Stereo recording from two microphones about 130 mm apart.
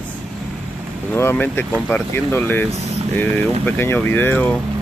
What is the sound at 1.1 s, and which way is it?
Speech, 15° left (ahead or behind).